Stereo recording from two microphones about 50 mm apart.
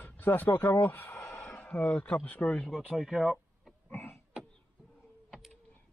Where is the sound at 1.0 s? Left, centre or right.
Left.